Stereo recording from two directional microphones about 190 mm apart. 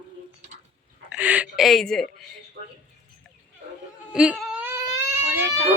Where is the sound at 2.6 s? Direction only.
55° right (ahead or behind).